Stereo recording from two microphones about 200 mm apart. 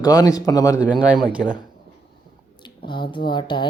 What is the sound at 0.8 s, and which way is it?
Speech, 5° right (ahead or behind).